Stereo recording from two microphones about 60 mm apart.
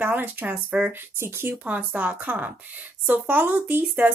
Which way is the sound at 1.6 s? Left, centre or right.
Right.